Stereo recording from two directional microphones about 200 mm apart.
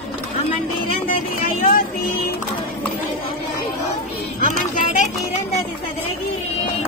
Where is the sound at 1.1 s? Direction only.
45° left (ahead or behind).